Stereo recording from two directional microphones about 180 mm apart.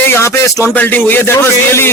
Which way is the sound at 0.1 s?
15° left (ahead or behind).